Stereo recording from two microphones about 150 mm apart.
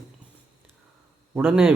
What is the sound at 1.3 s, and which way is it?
Speech, 10° right (ahead or behind).